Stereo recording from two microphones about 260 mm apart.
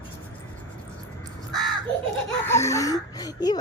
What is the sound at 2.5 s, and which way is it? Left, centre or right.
Speech, centre.